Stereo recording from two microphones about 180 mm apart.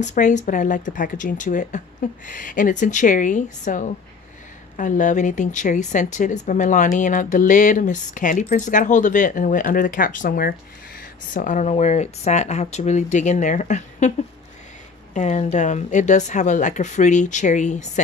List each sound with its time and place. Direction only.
0.0 s speech: 40° left (ahead or behind)
15.1 s speech: 40° left (ahead or behind)